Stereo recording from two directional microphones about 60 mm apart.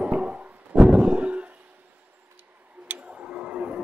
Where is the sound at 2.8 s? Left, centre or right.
Centre.